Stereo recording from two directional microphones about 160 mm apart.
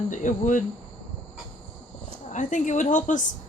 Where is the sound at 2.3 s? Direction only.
50° left (ahead or behind).